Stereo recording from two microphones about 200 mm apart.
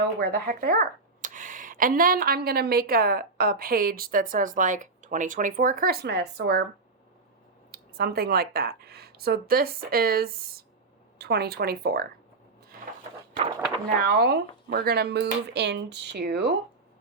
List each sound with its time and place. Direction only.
0.0 s speech: 50° right (ahead or behind)
7.7 s speech: 50° right (ahead or behind)
14.1 s speech: 50° right (ahead or behind)